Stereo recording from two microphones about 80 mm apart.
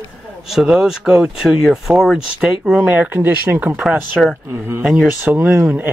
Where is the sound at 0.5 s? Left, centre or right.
Centre.